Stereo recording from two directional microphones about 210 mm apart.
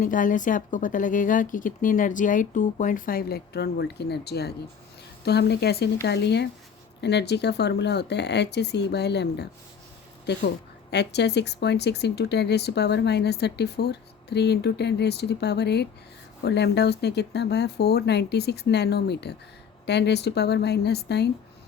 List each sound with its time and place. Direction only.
0.0 s speech: 40° left (ahead or behind)
10.9 s speech: 55° left (ahead or behind)